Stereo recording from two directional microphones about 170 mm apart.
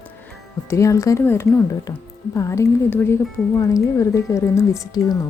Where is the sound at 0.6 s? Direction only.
15° left (ahead or behind).